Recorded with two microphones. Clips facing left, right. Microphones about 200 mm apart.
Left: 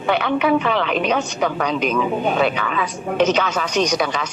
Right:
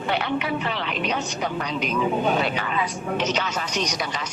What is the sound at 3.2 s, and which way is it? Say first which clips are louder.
A man's voice: left 10 dB; 55° left (ahead or behind).